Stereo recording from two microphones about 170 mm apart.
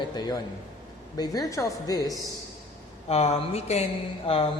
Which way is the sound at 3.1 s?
40° left (ahead or behind).